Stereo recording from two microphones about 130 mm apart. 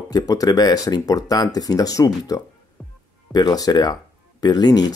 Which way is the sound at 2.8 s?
10° left (ahead or behind).